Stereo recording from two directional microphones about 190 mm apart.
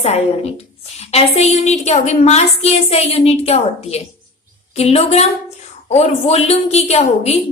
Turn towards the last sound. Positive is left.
turn(degrees=35)  # may be behind; listen again after turning